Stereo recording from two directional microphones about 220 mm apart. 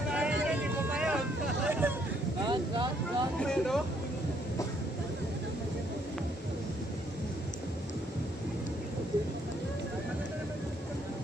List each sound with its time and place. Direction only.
0.1 s vehicle: 5° right (ahead or behind)
2.4 s vehicle: 20° right (ahead or behind)
3.3 s a sound: 5° left (ahead or behind)